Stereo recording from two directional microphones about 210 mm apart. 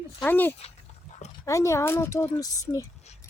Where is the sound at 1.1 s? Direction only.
35° left (ahead or behind).